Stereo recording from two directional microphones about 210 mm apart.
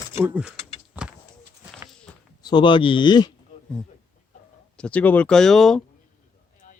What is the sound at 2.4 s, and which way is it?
Speech, 20° left (ahead or behind).